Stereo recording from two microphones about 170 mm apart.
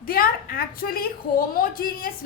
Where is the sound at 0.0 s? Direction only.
60° left (ahead or behind).